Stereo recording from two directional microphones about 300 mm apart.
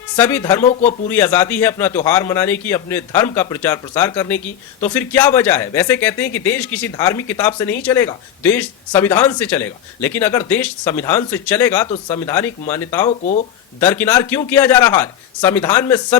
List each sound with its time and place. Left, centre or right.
0.2 s speech: centre
0.6 s speech: left
1.0 s speech: centre